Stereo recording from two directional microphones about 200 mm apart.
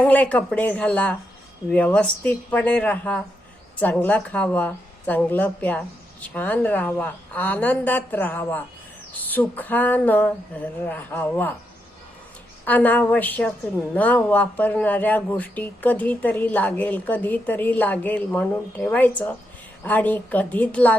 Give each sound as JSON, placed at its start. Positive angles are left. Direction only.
{"t": 0.0, "sound": "speech", "side_deg": 10}
{"t": 12.6, "sound": "speech", "side_deg": 10}